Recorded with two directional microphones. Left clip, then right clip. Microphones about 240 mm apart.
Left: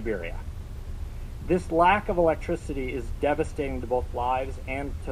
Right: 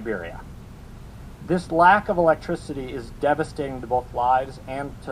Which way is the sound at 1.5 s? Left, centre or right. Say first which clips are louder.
Right 5 dB; left.